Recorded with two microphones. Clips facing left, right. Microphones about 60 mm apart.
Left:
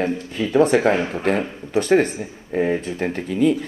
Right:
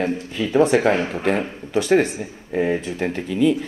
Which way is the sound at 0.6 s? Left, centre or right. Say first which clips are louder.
Even; left.